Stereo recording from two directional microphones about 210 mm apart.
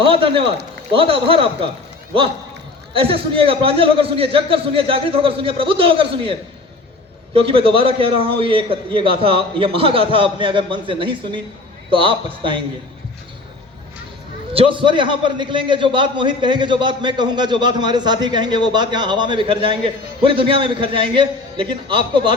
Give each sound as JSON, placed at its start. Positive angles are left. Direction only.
{"t": 0.0, "sound": "a man's voice", "side_deg": -25}
{"t": 2.9, "sound": "a man's voice", "side_deg": -25}
{"t": 7.3, "sound": "a man's voice", "side_deg": -25}
{"t": 14.5, "sound": "a man's voice", "side_deg": -25}